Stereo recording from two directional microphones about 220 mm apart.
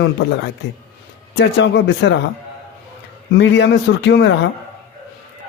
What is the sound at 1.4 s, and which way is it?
Speech, 50° left (ahead or behind).